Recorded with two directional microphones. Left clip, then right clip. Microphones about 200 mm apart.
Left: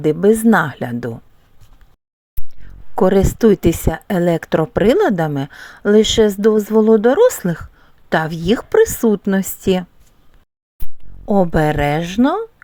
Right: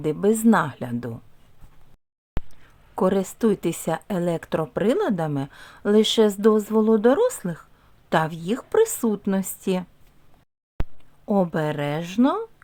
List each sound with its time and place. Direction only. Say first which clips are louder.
0.0 s speech: left 8 dB; 20° left (ahead or behind)
2.6 s speech: left 8 dB; 25° left (ahead or behind)
11.3 s speech: left 8 dB; 20° left (ahead or behind)